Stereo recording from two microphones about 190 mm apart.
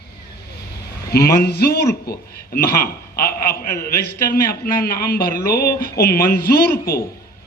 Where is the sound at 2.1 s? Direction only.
50° left (ahead or behind).